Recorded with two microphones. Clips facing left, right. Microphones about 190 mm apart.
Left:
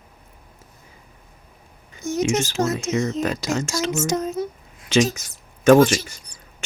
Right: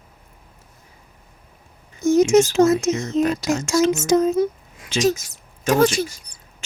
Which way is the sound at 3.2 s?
90° left.